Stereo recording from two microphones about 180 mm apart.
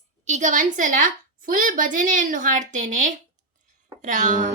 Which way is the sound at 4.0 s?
45° right (ahead or behind).